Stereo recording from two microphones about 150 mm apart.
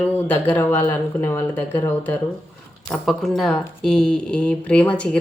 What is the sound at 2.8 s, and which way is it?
Speech, centre (ahead or behind).